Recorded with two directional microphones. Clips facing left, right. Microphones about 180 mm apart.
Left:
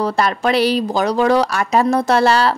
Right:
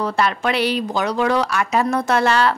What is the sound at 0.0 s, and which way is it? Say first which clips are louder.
Speech: left 3 dB; 35° left (ahead or behind).